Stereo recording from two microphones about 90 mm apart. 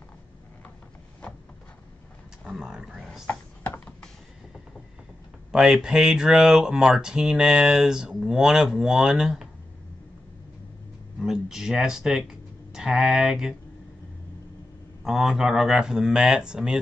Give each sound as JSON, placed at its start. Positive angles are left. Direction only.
{"t": 2.4, "sound": "speech", "side_deg": -5}
{"t": 3.3, "sound": "computer keyboard", "side_deg": 25}
{"t": 5.5, "sound": "speech", "side_deg": -5}
{"t": 11.1, "sound": "speech", "side_deg": -5}
{"t": 15.0, "sound": "speech", "side_deg": -5}